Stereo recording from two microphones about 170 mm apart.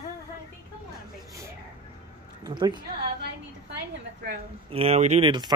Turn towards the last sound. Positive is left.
turn(degrees=-40)  # may be behind; listen again after turning